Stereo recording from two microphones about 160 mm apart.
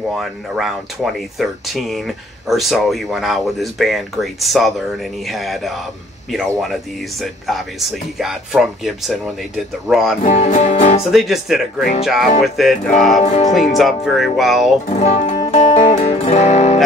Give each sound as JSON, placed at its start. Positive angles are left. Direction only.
{"t": 0.2, "sound": "speech", "side_deg": 0}
{"t": 10.2, "sound": "speech", "side_deg": 50}
{"t": 11.1, "sound": "speech", "side_deg": 0}
{"t": 13.2, "sound": "speech", "side_deg": 45}
{"t": 13.7, "sound": "speech", "side_deg": 0}
{"t": 14.9, "sound": "music", "side_deg": 40}